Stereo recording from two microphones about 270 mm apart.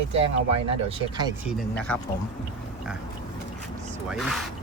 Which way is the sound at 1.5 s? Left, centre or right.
Centre.